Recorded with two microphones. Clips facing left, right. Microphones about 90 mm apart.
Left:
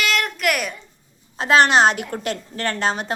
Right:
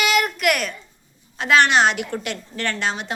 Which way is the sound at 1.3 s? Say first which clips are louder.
Left 1 dB; 35° left (ahead or behind).